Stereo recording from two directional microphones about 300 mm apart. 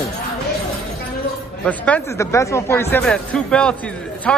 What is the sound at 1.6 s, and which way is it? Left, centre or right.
Speech, centre.